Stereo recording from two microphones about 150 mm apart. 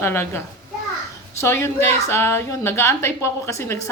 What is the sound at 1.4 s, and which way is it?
A woman's voice, 15° left (ahead or behind).